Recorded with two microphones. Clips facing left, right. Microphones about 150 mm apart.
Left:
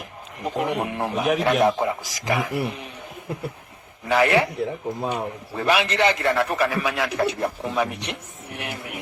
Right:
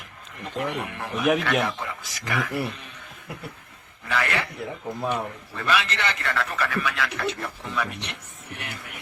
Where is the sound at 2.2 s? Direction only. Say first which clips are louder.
Left 3 dB; 20° left (ahead or behind).